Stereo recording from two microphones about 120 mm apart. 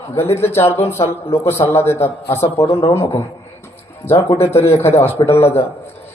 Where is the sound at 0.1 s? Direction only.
20° left (ahead or behind).